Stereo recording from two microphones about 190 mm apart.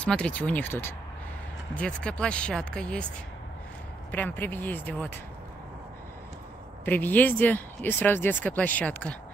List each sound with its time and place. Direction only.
0.0 s speech: 5° left (ahead or behind)
4.1 s speech: 10° left (ahead or behind)
6.8 s speech: 10° left (ahead or behind)